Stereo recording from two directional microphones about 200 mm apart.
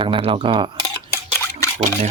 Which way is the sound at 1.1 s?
15° left (ahead or behind).